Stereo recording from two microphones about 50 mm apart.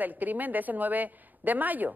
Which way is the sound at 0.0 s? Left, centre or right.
Right.